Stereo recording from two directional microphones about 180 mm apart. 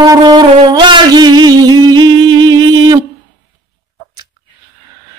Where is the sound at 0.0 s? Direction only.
20° right (ahead or behind).